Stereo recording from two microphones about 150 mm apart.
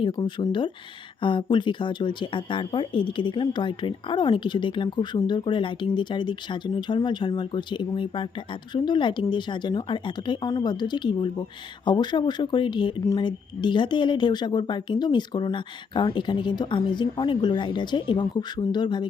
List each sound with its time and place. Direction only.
0.0 s speech: 30° left (ahead or behind)